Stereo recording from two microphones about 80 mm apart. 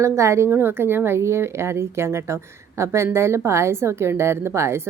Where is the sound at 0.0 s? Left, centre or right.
Right.